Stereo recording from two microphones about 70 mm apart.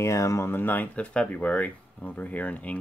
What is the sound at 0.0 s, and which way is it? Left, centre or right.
Speech, left.